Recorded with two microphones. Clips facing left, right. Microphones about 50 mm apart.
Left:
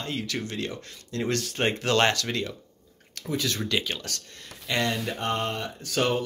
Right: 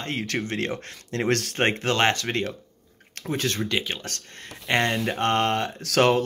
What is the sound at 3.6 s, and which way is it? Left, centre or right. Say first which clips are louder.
Speech: right 1 dB; right.